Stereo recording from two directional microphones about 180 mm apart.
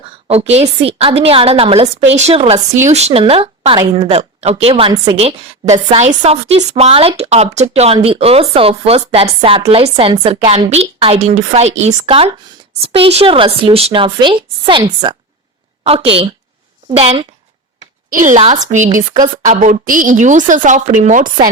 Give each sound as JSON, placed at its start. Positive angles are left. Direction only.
{"t": 0.3, "sound": "a woman's voice", "side_deg": -35}
{"t": 18.1, "sound": "a woman's voice", "side_deg": -45}